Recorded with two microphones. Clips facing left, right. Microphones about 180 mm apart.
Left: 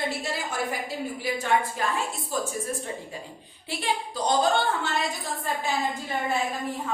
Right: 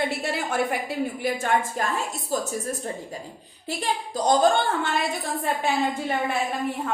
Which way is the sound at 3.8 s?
45° right (ahead or behind).